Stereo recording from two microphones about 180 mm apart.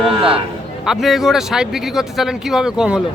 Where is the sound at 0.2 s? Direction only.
30° right (ahead or behind).